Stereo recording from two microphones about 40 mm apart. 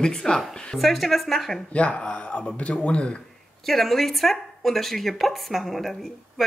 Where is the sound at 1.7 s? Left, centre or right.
Left.